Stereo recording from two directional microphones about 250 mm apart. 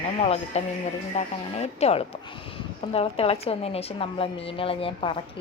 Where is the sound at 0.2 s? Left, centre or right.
Left.